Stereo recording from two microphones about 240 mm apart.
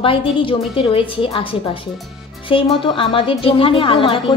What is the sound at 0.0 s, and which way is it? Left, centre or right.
A woman's voice, left.